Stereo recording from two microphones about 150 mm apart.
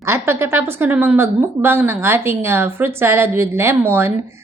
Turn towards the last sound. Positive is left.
turn(degrees=-15)  # may be behind; listen again after turning